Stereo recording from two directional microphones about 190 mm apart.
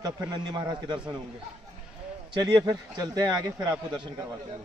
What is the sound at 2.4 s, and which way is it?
A man's voice, 20° right (ahead or behind).